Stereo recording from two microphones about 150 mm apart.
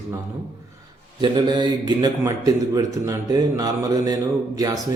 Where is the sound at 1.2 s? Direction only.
30° right (ahead or behind).